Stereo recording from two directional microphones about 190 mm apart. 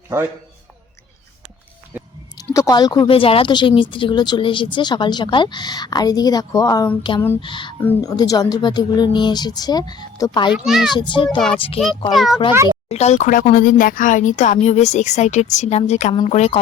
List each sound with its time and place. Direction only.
2.5 s speech: 20° left (ahead or behind)
10.5 s a child's voice: 5° right (ahead or behind)
10.9 s speech: 25° left (ahead or behind)
12.1 s a child's voice: centre (ahead or behind)
12.9 s speech: 35° left (ahead or behind)